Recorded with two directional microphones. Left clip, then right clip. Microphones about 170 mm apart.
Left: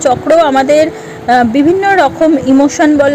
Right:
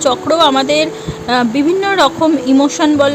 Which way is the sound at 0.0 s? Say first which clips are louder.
Left 3 dB; 10° left (ahead or behind).